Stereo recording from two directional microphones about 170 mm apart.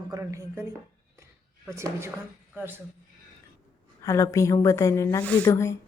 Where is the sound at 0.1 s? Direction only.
20° right (ahead or behind).